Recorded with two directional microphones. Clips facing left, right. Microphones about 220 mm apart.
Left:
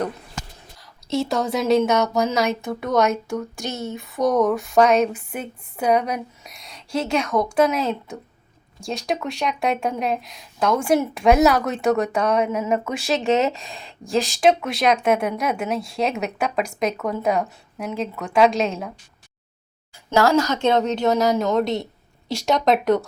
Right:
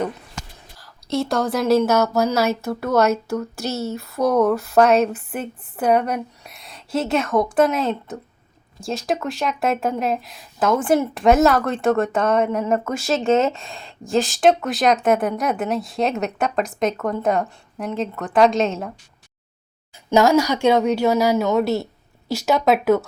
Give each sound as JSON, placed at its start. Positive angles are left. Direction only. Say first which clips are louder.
{"t": 0.8, "sound": "speech", "louder": "right 1 dB", "side_deg": 0}
{"t": 20.1, "sound": "a woman's voice", "louder": "right 2 dB", "side_deg": -15}